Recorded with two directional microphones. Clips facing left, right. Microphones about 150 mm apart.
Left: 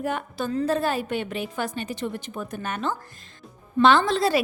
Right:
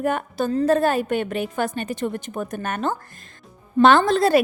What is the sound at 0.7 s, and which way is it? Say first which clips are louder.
A woman's voice: right 7 dB; 50° right (ahead or behind).